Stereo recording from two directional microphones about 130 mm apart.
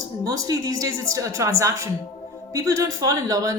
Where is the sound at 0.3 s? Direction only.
25° right (ahead or behind).